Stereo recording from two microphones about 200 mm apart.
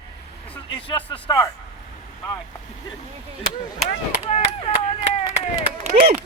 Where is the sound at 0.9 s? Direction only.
25° left (ahead or behind).